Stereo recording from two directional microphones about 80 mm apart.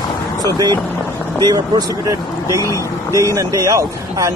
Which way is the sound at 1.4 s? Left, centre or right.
Right.